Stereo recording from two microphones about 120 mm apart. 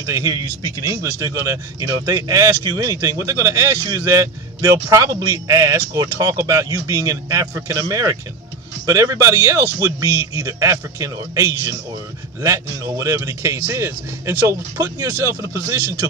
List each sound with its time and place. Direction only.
0.0 s a man's voice: 25° right (ahead or behind)